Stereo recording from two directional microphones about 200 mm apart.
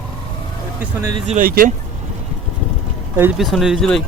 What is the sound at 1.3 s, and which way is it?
Speech, 45° right (ahead or behind).